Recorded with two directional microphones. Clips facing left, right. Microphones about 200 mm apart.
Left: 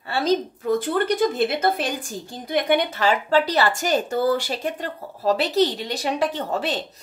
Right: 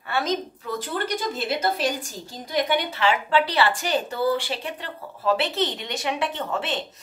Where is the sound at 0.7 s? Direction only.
55° left (ahead or behind).